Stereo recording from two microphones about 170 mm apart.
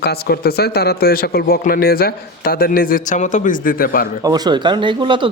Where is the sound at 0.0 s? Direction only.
70° left (ahead or behind).